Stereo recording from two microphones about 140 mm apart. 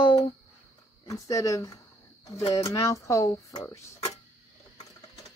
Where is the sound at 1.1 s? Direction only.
25° left (ahead or behind).